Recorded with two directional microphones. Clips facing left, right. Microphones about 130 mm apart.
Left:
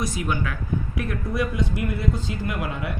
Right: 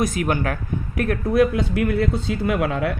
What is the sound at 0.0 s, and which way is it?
A man's voice, 55° right (ahead or behind).